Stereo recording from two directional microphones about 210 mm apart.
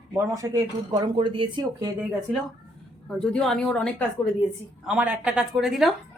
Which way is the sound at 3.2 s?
5° left (ahead or behind).